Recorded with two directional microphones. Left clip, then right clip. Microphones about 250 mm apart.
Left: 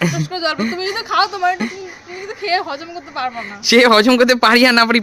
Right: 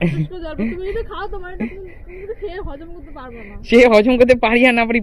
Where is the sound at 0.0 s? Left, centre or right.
Left.